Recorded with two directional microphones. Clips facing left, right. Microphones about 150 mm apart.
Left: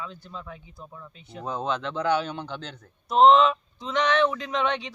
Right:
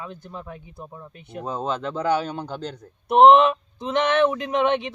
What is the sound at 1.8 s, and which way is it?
Speech, 10° right (ahead or behind).